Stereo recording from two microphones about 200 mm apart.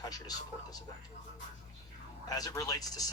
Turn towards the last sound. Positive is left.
turn(degrees=20)  # may be behind; listen again after turning